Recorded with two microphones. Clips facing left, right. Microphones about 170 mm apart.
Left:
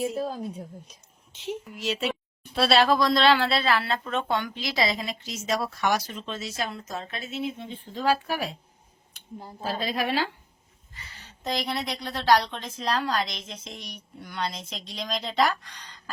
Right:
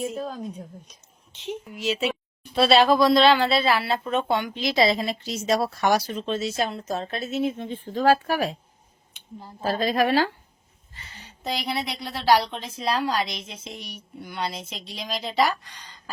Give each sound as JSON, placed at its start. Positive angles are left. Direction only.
{"t": 0.0, "sound": "a woman's voice", "side_deg": 5}
{"t": 9.6, "sound": "a woman's voice", "side_deg": -45}
{"t": 11.4, "sound": "a woman's voice", "side_deg": -10}